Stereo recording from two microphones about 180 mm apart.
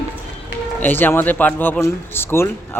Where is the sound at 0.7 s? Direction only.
10° left (ahead or behind).